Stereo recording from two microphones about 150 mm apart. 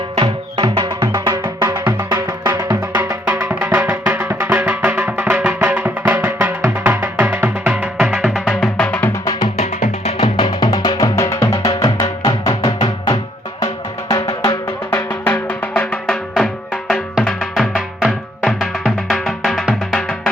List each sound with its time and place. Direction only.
0.2 s music: 30° right (ahead or behind); by 9.0 s 10° left (ahead or behind)
10.3 s music: 30° left (ahead or behind)
14.1 s music: 25° left (ahead or behind)
14.8 s music: 15° left (ahead or behind)